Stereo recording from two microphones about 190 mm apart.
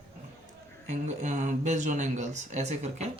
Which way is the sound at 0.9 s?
40° right (ahead or behind).